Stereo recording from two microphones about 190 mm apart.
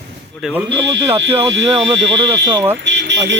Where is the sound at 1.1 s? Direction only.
30° right (ahead or behind).